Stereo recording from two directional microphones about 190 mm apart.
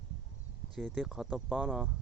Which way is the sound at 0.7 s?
Centre (ahead or behind).